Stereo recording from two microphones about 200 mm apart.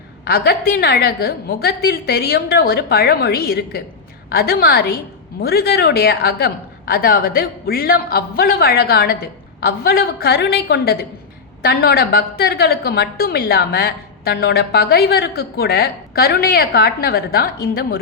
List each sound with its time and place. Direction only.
0.3 s a woman's voice: 50° left (ahead or behind)